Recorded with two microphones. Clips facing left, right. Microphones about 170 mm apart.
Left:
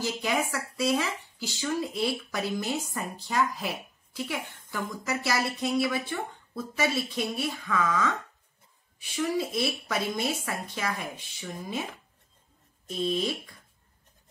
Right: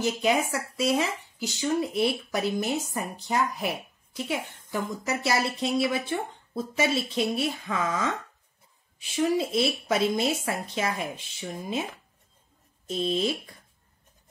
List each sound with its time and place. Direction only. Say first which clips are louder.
0.0 s a woman's voice: right 4 dB; 20° right (ahead or behind)
12.8 s a woman's voice: right 2 dB; 25° right (ahead or behind)